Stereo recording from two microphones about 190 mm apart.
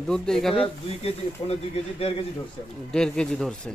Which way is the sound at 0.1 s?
5° left (ahead or behind).